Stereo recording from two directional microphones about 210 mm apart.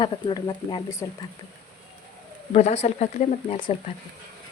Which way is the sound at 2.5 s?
30° left (ahead or behind).